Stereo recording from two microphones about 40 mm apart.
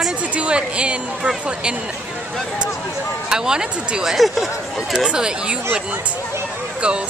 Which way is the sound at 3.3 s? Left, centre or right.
Centre.